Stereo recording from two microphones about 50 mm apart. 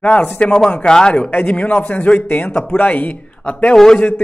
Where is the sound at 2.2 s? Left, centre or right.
Left.